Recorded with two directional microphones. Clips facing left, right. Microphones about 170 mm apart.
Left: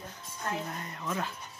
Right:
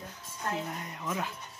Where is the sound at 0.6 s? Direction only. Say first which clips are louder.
Even; 10° right (ahead or behind).